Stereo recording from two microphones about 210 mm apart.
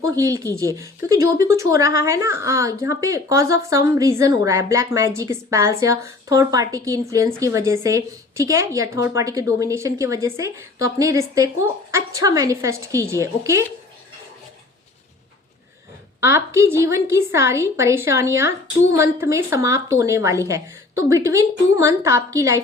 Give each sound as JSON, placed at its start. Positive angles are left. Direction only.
{"t": 0.0, "sound": "speech", "side_deg": -15}
{"t": 16.6, "sound": "speech", "side_deg": -15}